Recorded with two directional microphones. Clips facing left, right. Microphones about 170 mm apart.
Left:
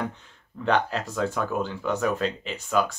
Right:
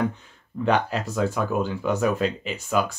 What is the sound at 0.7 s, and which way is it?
Speech, 5° right (ahead or behind).